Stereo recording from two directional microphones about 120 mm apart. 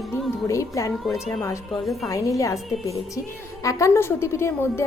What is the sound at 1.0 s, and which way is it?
Speech, centre (ahead or behind).